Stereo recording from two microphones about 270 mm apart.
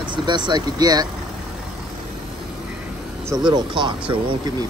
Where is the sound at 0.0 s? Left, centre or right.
Centre.